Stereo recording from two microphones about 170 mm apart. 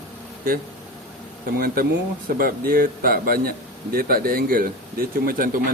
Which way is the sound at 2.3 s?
60° right (ahead or behind).